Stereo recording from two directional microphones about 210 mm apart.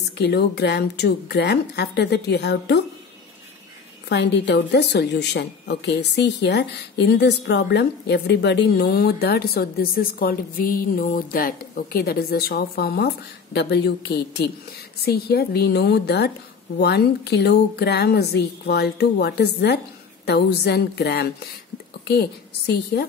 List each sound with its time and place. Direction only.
0.2 s a woman's voice: 50° left (ahead or behind)
4.1 s a woman's voice: 55° left (ahead or behind)